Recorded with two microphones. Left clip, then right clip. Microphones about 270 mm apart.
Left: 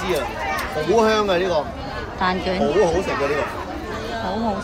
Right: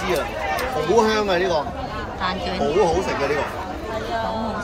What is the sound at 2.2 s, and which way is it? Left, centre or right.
Speech, centre.